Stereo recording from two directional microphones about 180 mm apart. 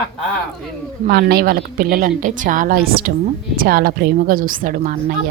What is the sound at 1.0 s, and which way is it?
A woman's voice, 60° right (ahead or behind).